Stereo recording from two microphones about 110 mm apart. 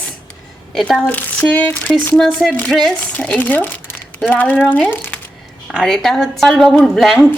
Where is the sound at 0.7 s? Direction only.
5° left (ahead or behind).